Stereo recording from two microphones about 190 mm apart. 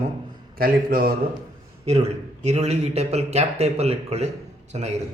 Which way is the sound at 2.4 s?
35° right (ahead or behind).